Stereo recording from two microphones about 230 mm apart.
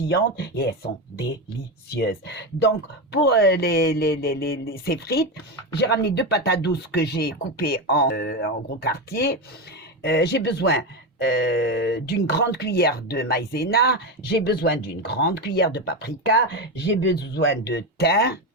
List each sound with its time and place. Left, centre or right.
0.1 s speech: left
2.0 s speech: left